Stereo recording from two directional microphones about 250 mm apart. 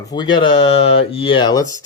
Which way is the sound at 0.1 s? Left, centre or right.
Centre.